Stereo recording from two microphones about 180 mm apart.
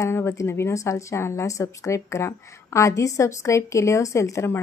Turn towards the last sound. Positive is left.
turn(degrees=15)  # may be behind; listen again after turning